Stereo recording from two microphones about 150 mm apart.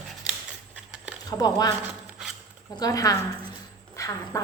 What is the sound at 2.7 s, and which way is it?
A woman's voice, 25° left (ahead or behind).